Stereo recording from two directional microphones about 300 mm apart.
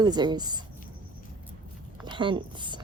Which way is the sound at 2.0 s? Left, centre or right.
Centre.